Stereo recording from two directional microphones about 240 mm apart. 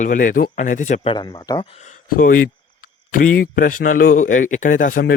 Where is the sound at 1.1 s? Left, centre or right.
Centre.